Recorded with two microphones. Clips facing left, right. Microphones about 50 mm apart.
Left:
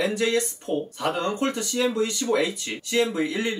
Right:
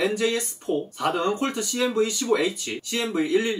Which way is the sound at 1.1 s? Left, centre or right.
Centre.